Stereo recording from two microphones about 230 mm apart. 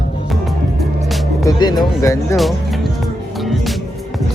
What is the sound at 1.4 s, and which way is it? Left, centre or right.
Speech, centre.